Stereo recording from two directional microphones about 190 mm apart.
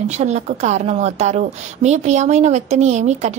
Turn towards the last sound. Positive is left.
turn(degrees=-35)  # may be behind; listen again after turning